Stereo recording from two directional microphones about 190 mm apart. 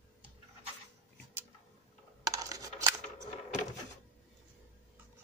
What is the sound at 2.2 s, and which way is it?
Coin, 15° right (ahead or behind).